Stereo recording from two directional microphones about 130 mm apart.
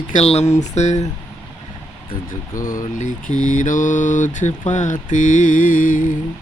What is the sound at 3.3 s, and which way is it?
Mantra, 30° right (ahead or behind).